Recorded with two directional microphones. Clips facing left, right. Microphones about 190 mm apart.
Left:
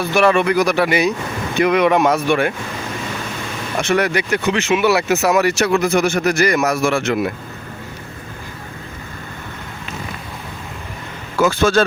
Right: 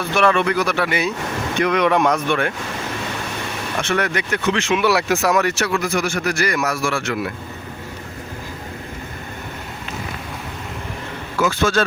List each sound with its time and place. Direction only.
0.0 s speech: 10° left (ahead or behind)
3.8 s speech: 10° left (ahead or behind)
5.6 s speech: 20° left (ahead or behind)
11.3 s speech: 30° left (ahead or behind)